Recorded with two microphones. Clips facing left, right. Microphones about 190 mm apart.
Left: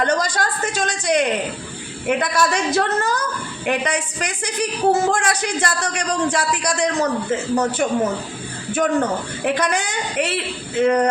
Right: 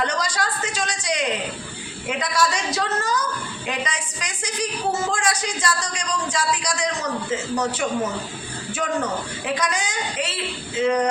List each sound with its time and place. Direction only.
0.0 s a woman's voice: 50° left (ahead or behind)